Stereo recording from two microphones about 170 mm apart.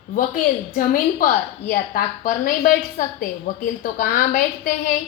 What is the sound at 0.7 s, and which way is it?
A woman's voice, 55° left (ahead or behind).